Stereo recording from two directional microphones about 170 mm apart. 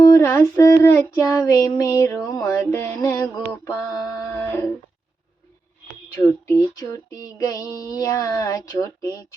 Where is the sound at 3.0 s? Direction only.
15° left (ahead or behind).